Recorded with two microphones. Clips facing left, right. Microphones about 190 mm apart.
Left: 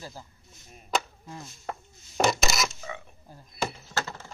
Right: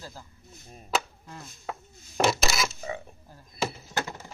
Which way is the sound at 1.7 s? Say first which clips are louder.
Even; centre (ahead or behind).